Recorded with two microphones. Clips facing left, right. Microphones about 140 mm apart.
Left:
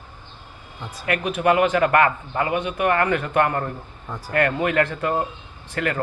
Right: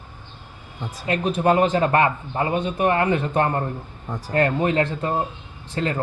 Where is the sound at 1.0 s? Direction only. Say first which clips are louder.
Even; 30° right (ahead or behind).